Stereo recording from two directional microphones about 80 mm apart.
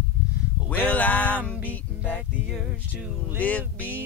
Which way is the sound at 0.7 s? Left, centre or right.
Left.